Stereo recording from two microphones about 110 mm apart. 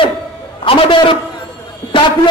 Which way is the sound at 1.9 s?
45° left (ahead or behind).